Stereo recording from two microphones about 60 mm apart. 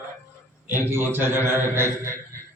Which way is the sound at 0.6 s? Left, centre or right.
Right.